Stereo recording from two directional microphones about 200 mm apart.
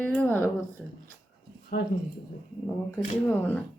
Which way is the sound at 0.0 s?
10° left (ahead or behind).